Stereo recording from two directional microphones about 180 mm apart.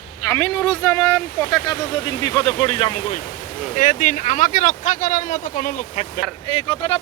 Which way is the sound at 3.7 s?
45° left (ahead or behind).